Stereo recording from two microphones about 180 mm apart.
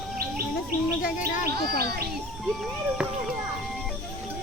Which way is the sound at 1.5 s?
60° right (ahead or behind).